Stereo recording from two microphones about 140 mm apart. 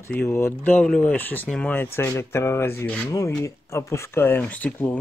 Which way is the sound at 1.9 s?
20° left (ahead or behind).